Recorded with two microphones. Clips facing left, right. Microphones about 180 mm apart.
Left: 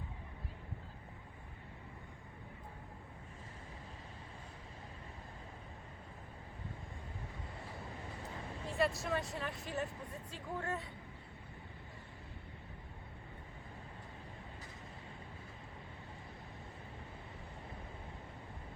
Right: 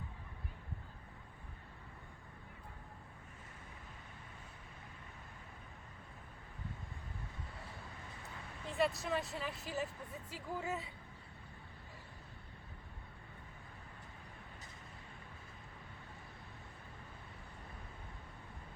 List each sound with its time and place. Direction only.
8.8 s speech: centre (ahead or behind)